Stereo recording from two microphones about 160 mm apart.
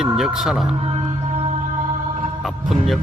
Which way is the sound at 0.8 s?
40° right (ahead or behind).